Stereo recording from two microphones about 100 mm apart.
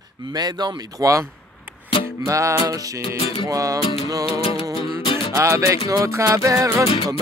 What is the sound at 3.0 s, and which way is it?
Music, 75° left (ahead or behind).